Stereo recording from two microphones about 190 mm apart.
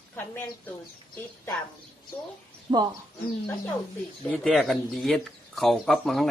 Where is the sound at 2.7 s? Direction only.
25° right (ahead or behind).